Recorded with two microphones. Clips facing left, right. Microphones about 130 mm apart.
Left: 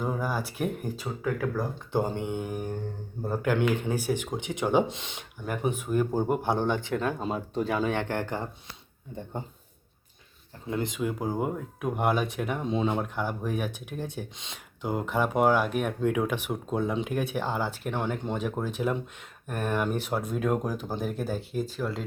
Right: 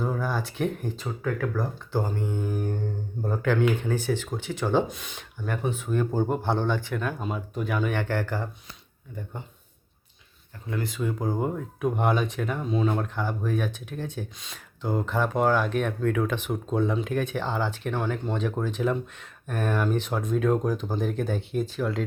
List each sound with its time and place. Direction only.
0.0 s speech: 10° left (ahead or behind)
5.5 s speech: 15° left (ahead or behind)
10.7 s speech: 20° left (ahead or behind)
11.0 s speech: 10° left (ahead or behind)
12.6 s speech: 20° left (ahead or behind)
14.3 s speech: 25° left (ahead or behind); by 22.0 s centre (ahead or behind)